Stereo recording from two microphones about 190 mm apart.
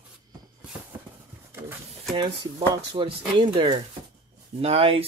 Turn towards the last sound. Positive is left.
turn(degrees=-30)  # may be behind; listen again after turning